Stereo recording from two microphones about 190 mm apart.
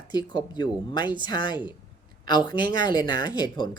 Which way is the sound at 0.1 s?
20° left (ahead or behind).